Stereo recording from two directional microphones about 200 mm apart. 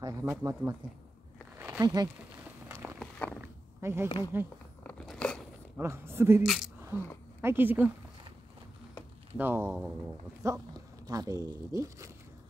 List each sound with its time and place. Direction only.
0.0 s speech: 15° right (ahead or behind)
1.6 s a sound: 10° right (ahead or behind)
3.0 s a sound: 5° left (ahead or behind)
3.3 s a sound: 10° right (ahead or behind)
4.3 s speech: 10° right (ahead or behind)
4.8 s biting: 5° left (ahead or behind)
5.8 s speech: 10° right (ahead or behind)
6.4 s speech: centre (ahead or behind)
9.4 s speech: 10° right (ahead or behind)